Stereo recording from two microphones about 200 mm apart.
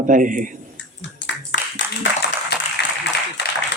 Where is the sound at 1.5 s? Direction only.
65° left (ahead or behind).